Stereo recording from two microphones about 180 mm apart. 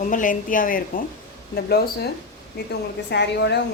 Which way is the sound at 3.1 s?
70° left (ahead or behind).